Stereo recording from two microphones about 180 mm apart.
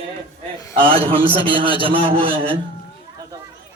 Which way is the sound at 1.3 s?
30° right (ahead or behind).